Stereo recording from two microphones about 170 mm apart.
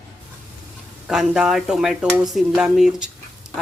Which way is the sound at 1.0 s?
5° right (ahead or behind).